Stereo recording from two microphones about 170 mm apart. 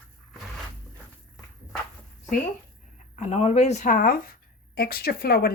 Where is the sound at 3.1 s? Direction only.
40° left (ahead or behind); by 5.5 s 65° left (ahead or behind).